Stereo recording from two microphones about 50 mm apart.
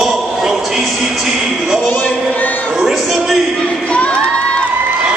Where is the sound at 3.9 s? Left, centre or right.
Left.